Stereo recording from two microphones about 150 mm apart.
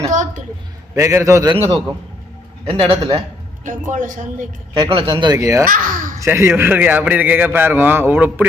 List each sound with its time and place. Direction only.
0.1 s a sound: 55° right (ahead or behind)
0.9 s a man's voice: 20° right (ahead or behind)
2.6 s speech: 35° right (ahead or behind)
3.6 s a woman's voice: 60° right (ahead or behind)
4.9 s speech: 35° right (ahead or behind)
5.6 s speech: 65° right (ahead or behind)
6.1 s a man's voice: 20° right (ahead or behind)